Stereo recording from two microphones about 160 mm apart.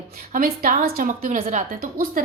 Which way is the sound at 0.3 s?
60° right (ahead or behind).